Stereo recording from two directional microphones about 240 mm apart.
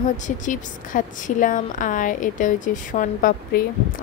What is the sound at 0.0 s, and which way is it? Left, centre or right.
A woman's voice, left.